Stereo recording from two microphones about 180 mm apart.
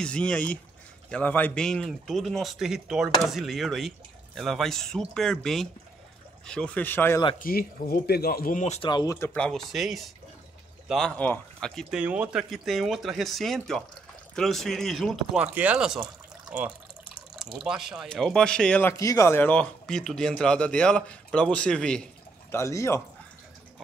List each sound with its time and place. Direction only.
0.0 s speech: 5° left (ahead or behind)
7.3 s speech: 55° left (ahead or behind)
8.8 s speech: 20° left (ahead or behind); by 22.0 s 5° left (ahead or behind)
22.5 s speech: 15° left (ahead or behind)